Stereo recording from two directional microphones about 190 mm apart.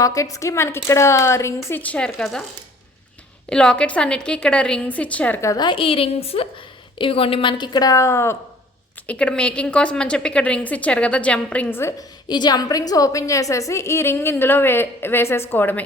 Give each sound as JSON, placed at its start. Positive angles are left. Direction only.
{"t": 0.0, "sound": "a woman's voice", "side_deg": 15}
{"t": 3.5, "sound": "a woman's voice", "side_deg": 5}